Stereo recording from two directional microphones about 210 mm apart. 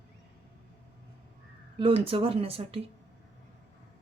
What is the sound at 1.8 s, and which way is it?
Speech, 25° right (ahead or behind).